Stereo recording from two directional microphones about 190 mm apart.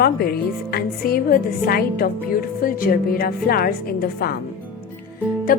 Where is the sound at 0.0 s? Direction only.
55° left (ahead or behind).